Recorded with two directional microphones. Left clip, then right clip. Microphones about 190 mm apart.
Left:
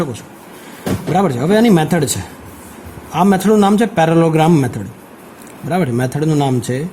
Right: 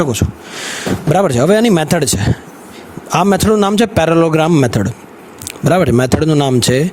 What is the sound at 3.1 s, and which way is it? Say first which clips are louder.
A man's voice: right 1 dB; 50° right (ahead or behind).